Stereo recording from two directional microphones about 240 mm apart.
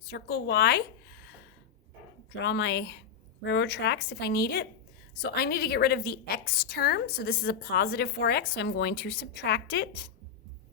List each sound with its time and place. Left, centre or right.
0.0 s a woman's voice: left
2.4 s a woman's voice: left